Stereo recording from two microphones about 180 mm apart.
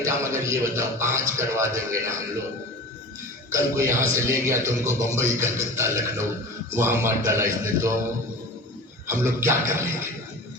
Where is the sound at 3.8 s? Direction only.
15° right (ahead or behind).